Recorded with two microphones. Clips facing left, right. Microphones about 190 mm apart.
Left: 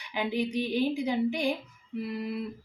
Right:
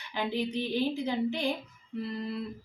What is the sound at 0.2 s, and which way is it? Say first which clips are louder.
Speech: left 2 dB; 15° left (ahead or behind).